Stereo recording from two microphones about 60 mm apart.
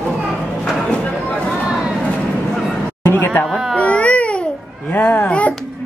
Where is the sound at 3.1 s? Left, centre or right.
Left.